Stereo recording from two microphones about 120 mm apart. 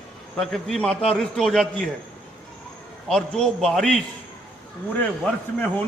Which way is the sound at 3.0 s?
5° left (ahead or behind).